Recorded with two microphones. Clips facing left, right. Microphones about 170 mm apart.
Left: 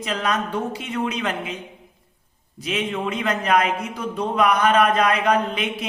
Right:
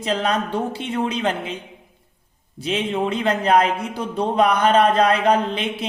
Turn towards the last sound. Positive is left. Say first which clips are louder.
# right 1 dB
turn(degrees=-30)  # may be behind; listen again after turning